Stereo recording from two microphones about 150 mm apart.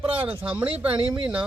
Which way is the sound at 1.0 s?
35° right (ahead or behind).